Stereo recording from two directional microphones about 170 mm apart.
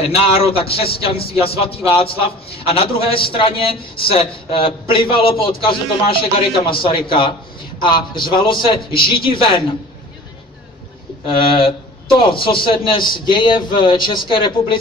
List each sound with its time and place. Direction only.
0.0 s a man's voice: 35° left (ahead or behind)
11.5 s a man's voice: 30° left (ahead or behind)